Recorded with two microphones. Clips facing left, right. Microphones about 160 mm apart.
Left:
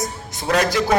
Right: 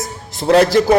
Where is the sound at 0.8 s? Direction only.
45° right (ahead or behind).